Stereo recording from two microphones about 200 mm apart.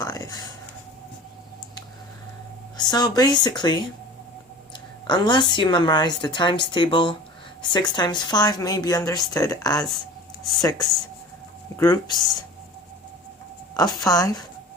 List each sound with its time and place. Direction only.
0.0 s a sound: 15° left (ahead or behind)
2.7 s speech: 20° left (ahead or behind)
5.0 s a woman's voice: 20° left (ahead or behind)
13.7 s a woman's voice: 20° left (ahead or behind)